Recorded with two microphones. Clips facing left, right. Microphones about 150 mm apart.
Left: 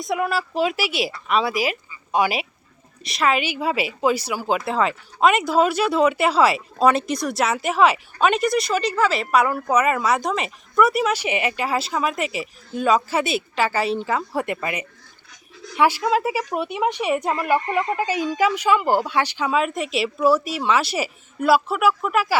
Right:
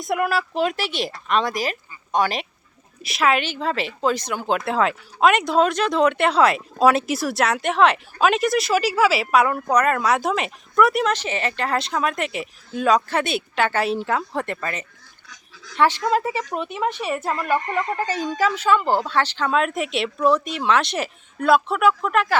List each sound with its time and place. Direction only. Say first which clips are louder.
0.0 s a woman's voice: right 1 dB; centre (ahead or behind)
3.0 s speech: right 1 dB; centre (ahead or behind)
3.4 s speech: left 1 dB; 10° left (ahead or behind)
14.4 s a woman's voice: left 2 dB; 15° left (ahead or behind)